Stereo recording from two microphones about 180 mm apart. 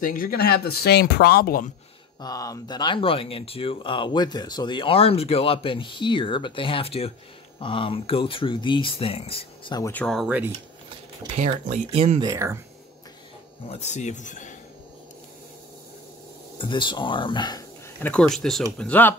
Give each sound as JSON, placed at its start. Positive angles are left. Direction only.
{"t": 0.0, "sound": "speech", "side_deg": 50}
{"t": 2.2, "sound": "speech", "side_deg": 20}
{"t": 9.8, "sound": "speech", "side_deg": 15}
{"t": 10.0, "sound": "speech", "side_deg": 0}
{"t": 11.3, "sound": "speech", "side_deg": -40}
{"t": 12.2, "sound": "speech", "side_deg": -15}
{"t": 13.7, "sound": "speech", "side_deg": 40}
{"t": 16.5, "sound": "speech", "side_deg": 25}
{"t": 18.0, "sound": "speech", "side_deg": 5}